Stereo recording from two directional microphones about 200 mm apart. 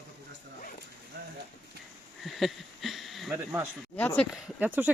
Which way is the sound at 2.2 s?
Centre (ahead or behind).